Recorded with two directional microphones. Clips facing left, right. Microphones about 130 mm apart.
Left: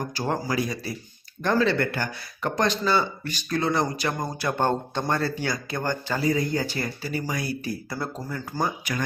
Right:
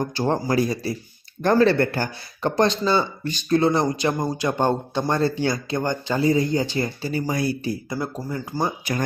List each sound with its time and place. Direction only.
0.0 s a man's voice: 25° right (ahead or behind)
7.9 s speech: 15° right (ahead or behind)
8.6 s speech: 30° right (ahead or behind)